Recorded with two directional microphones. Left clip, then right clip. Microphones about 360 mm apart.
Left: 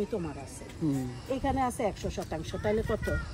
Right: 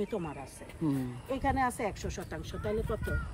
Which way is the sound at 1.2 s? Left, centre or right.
Centre.